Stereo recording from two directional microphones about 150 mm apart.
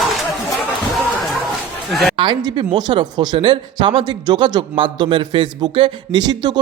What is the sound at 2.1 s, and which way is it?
Speech, 35° right (ahead or behind).